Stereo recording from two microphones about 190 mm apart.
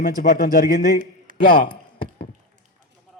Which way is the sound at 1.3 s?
50° right (ahead or behind).